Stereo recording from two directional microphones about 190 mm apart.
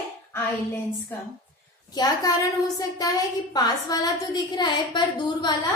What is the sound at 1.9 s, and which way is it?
A woman's voice, 20° left (ahead or behind).